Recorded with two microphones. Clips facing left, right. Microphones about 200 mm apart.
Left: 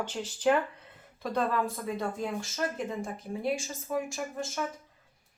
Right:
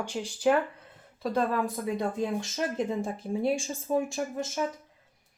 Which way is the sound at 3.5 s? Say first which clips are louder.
Right 2 dB; 30° right (ahead or behind).